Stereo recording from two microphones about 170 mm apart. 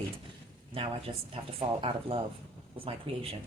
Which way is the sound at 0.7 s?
35° right (ahead or behind).